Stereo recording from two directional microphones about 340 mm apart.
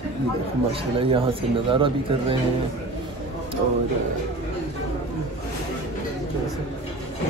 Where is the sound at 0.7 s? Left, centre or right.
Centre.